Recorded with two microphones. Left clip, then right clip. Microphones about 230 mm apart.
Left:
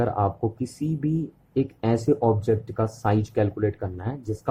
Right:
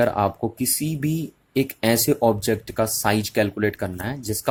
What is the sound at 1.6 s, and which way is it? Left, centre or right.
Speech, right.